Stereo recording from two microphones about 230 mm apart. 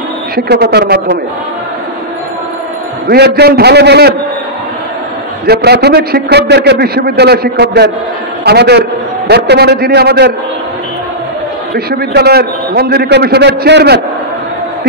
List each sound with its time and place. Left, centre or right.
0.5 s a man's voice: right
3.1 s a man's voice: right
5.5 s a man's voice: right
11.7 s a man's voice: right